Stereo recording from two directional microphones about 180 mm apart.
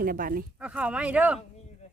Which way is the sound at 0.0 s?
50° right (ahead or behind).